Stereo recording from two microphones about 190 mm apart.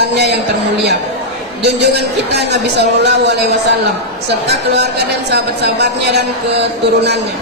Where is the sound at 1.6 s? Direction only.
60° right (ahead or behind).